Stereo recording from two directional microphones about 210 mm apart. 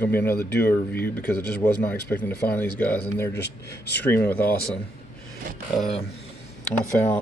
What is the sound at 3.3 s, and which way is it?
Speech, 55° left (ahead or behind).